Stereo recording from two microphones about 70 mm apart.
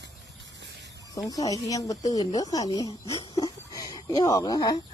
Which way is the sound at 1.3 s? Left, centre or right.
Left.